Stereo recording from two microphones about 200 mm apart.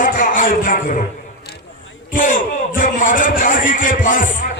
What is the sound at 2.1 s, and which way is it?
A man's voice, 40° left (ahead or behind).